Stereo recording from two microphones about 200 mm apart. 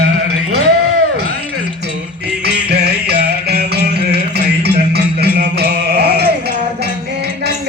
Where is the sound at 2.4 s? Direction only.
55° right (ahead or behind).